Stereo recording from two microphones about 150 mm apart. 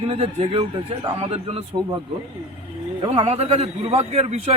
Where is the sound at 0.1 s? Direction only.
40° right (ahead or behind).